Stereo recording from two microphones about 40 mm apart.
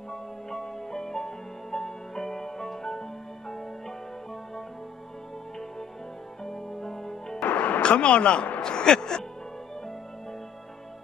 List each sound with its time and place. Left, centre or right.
0.1 s music: centre
6.4 s music: centre
7.4 s music: left
7.8 s speech: left